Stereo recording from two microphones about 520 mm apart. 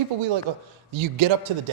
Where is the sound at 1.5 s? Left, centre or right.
Right.